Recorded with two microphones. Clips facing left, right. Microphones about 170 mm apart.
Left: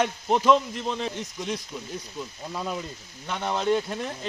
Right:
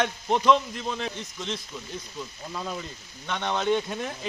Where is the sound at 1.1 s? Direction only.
15° left (ahead or behind).